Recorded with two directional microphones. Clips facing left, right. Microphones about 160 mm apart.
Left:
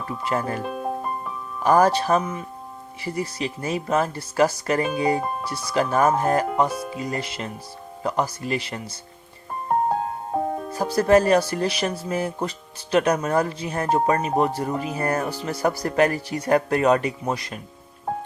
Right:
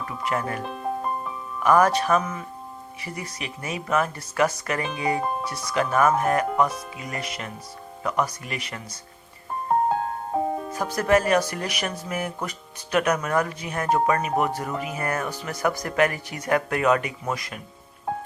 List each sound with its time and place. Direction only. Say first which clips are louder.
0.0 s speech: left 2 dB; 30° left (ahead or behind)
0.6 s music: left 2 dB; 5° left (ahead or behind)
1.6 s speech: left 1 dB; 30° left (ahead or behind)
6.7 s speech: left 4 dB; 5° left (ahead or behind)
6.9 s speech: left 5 dB; 30° left (ahead or behind)
9.6 s music: even; centre (ahead or behind)
10.7 s speech: left 5 dB; 30° left (ahead or behind)